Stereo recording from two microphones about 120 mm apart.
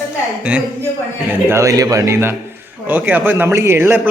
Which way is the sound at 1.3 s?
20° right (ahead or behind).